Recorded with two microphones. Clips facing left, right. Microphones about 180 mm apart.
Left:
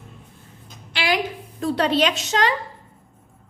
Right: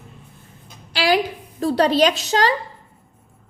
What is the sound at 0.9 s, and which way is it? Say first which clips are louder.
A woman's voice: right 4 dB; 35° right (ahead or behind).